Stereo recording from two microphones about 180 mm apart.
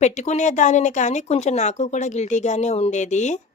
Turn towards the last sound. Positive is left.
turn(degrees=40)  # may be behind; listen again after turning